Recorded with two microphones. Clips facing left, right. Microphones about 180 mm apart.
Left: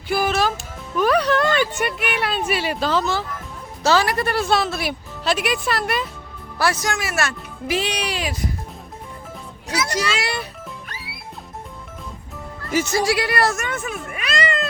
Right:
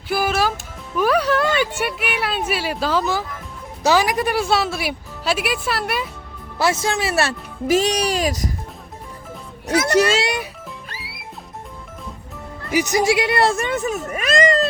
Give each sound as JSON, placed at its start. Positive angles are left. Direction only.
{"t": 0.1, "sound": "music", "side_deg": -5}
{"t": 0.9, "sound": "a woman's voice", "side_deg": -5}
{"t": 6.6, "sound": "speech", "side_deg": -25}
{"t": 9.6, "sound": "speech", "side_deg": -55}
{"t": 10.2, "sound": "a child's voice", "side_deg": -20}
{"t": 12.7, "sound": "speech", "side_deg": -15}